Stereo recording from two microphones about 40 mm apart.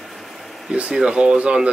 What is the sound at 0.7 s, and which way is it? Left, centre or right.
Speech, right.